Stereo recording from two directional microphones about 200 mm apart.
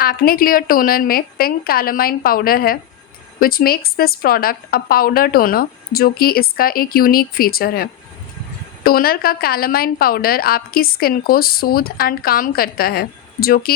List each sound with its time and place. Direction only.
0.0 s a woman's voice: 50° left (ahead or behind)